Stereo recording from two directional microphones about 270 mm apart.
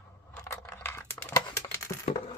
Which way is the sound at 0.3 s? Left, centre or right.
Centre.